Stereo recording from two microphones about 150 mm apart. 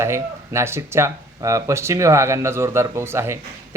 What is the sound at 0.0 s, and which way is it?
Speech, 15° right (ahead or behind).